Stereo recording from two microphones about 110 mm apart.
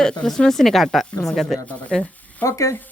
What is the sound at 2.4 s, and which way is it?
Speech, 30° left (ahead or behind).